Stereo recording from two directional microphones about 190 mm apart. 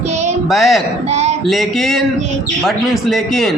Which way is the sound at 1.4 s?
Centre (ahead or behind).